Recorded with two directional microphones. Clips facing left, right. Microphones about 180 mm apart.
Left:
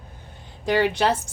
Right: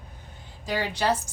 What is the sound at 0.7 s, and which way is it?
Speech, 70° left (ahead or behind).